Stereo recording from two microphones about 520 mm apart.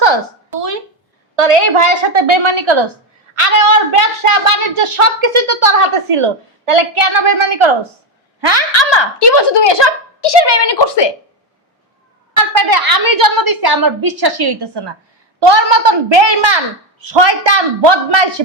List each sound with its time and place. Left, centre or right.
1.4 s a woman's voice: right
3.4 s a woman's voice: right
8.4 s a woman's voice: right
8.7 s a child's voice: left
12.5 s a woman's voice: right